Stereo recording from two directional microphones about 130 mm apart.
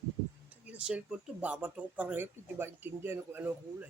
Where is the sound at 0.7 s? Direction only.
10° right (ahead or behind).